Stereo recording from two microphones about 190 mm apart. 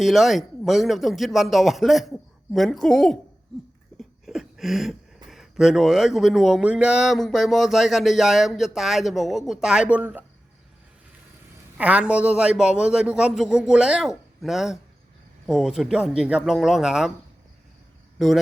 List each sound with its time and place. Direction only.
0.0 s speech: centre (ahead or behind)
11.8 s speech: 5° right (ahead or behind)